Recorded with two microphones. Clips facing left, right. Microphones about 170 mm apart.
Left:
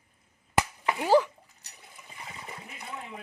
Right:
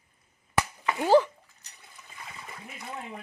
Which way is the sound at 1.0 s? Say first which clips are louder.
Right 2 dB; 5° left (ahead or behind).